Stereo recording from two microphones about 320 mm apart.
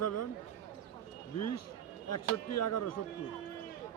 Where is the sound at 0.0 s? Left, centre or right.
Left.